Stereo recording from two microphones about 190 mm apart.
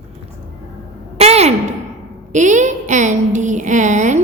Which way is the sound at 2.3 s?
40° right (ahead or behind).